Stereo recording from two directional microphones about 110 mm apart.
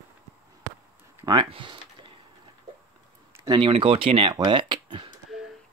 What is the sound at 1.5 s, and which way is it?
Typing, 50° right (ahead or behind).